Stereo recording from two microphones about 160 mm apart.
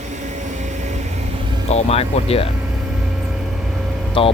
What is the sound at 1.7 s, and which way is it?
Speech, 40° left (ahead or behind).